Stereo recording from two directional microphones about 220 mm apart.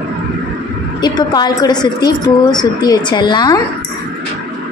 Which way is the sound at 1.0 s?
20° left (ahead or behind).